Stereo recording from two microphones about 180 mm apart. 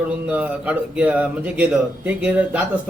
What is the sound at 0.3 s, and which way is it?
A man's voice, 10° right (ahead or behind).